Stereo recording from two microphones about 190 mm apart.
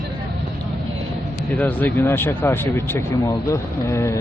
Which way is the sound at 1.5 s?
10° left (ahead or behind).